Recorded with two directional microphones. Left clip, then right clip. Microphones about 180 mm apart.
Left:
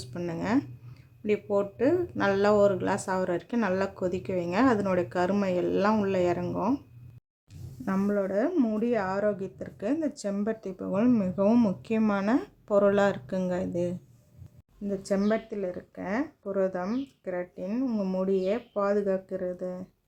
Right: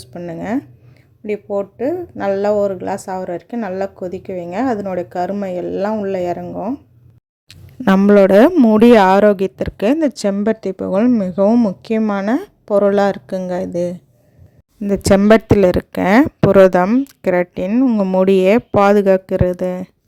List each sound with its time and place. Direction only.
0.0 s speech: 25° right (ahead or behind)
8.0 s a woman's voice: 70° right (ahead or behind); by 13.9 s 35° right (ahead or behind)
14.8 s speech: 60° right (ahead or behind)